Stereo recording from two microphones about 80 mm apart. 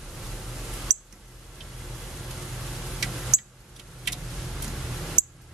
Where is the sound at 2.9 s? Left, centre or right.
Centre.